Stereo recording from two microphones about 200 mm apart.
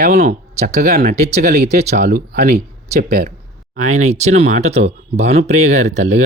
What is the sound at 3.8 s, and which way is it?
Speech, 35° right (ahead or behind).